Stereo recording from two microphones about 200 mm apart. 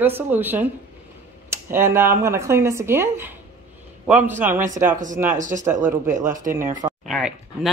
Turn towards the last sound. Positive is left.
turn(degrees=0)  # may be behind; listen again after turning